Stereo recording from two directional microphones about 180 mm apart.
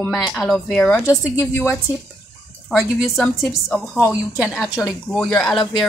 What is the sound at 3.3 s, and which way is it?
A woman's voice, centre (ahead or behind).